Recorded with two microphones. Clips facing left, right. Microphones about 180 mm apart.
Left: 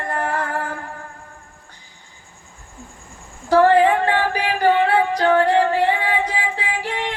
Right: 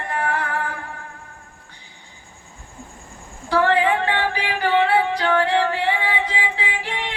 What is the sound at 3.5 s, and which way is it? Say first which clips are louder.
Music: left 5 dB; 45° left (ahead or behind).